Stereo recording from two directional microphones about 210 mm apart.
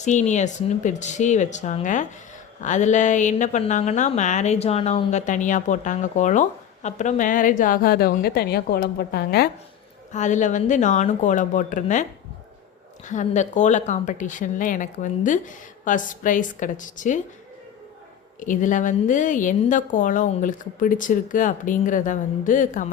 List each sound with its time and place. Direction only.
0.0 s a woman's voice: 35° left (ahead or behind)
10.1 s a woman's voice: 35° left (ahead or behind)
13.1 s a woman's voice: 35° left (ahead or behind)
18.3 s a woman's voice: 40° left (ahead or behind)